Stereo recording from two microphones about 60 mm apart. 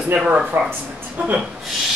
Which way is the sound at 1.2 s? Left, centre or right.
Right.